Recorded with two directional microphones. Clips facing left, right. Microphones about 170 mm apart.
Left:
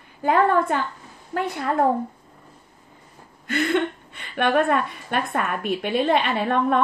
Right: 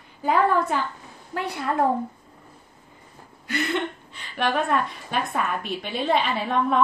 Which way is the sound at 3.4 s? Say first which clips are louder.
Left 4 dB; 60° left (ahead or behind).